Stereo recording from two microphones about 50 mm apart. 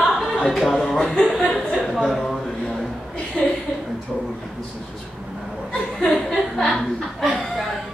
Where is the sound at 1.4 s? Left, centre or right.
Centre.